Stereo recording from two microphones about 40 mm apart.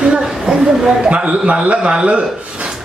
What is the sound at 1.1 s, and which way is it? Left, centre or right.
A man's voice, right.